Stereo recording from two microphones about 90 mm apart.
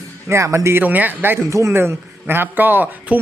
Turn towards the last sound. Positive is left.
turn(degrees=-20)  # may be behind; listen again after turning